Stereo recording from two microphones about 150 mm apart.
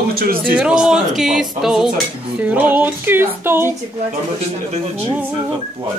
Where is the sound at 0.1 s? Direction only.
80° right.